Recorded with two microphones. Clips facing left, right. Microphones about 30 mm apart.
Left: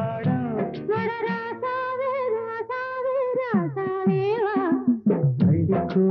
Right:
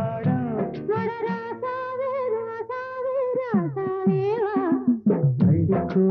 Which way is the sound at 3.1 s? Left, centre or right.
Left.